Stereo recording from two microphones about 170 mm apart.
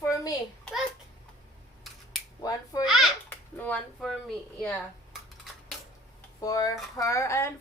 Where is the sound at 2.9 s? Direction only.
Centre (ahead or behind).